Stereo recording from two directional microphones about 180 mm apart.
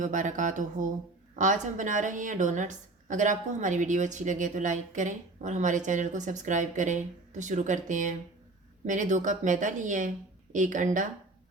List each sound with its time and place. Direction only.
0.0 s a woman's voice: 45° right (ahead or behind)